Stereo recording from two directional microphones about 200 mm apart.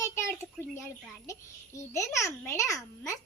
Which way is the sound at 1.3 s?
15° left (ahead or behind).